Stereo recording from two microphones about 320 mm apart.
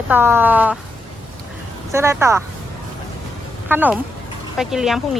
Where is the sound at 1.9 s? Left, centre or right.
Centre.